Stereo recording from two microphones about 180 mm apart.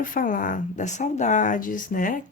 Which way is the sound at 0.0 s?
50° left (ahead or behind).